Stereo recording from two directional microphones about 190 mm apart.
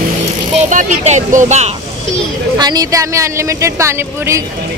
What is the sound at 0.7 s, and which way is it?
Speech, 40° right (ahead or behind).